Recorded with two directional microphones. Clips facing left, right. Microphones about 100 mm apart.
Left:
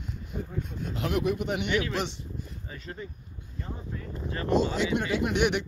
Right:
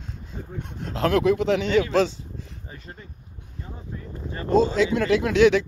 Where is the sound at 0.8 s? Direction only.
90° right.